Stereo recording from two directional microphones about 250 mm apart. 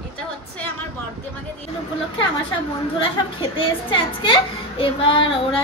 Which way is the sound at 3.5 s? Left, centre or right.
Left.